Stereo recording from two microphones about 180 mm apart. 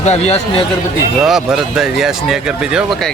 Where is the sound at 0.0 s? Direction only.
40° left (ahead or behind).